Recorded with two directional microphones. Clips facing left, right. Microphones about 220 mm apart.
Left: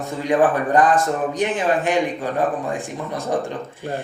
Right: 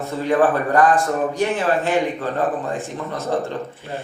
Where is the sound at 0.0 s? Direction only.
15° left (ahead or behind).